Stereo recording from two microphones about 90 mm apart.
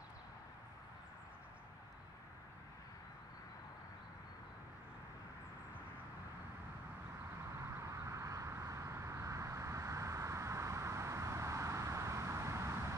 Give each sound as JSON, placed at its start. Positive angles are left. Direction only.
{"t": 7.8, "sound": "vehicle", "side_deg": -35}